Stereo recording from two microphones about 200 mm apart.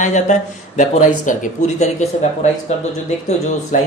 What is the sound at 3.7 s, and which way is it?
Speech, 40° left (ahead or behind).